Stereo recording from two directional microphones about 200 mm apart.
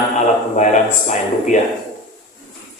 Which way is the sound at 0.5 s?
35° left (ahead or behind).